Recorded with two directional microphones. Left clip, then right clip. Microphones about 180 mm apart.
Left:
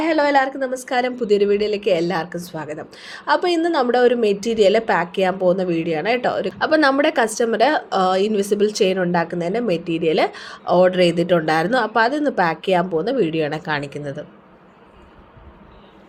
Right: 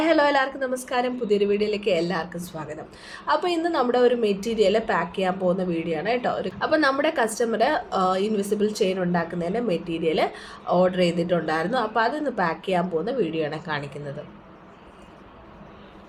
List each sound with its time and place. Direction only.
0.0 s a woman's voice: 20° left (ahead or behind)